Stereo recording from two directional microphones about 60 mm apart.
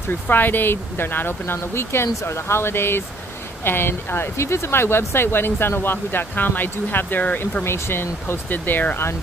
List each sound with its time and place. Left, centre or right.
0.3 s speech: left
7.6 s speech: left